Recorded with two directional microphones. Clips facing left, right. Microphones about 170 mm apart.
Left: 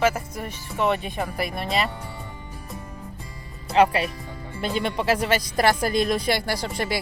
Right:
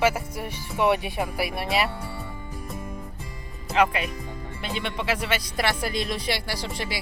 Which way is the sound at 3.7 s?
35° left (ahead or behind).